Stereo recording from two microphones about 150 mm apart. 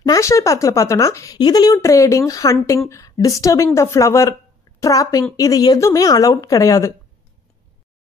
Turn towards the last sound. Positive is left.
turn(degrees=20)  # may be behind; listen again after turning